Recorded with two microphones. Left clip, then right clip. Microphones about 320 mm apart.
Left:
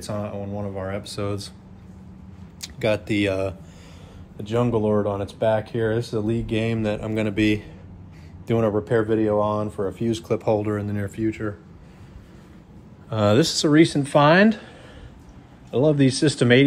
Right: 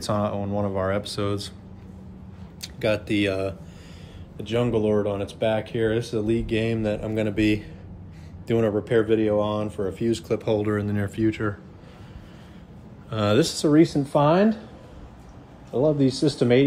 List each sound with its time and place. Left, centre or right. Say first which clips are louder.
0.0 s speech: right 4 dB; centre
2.6 s speech: left 1 dB; centre
9.4 s speech: left 2 dB; left
9.8 s speech: even; centre
13.1 s speech: left 3 dB; centre
15.7 s speech: left 2 dB; left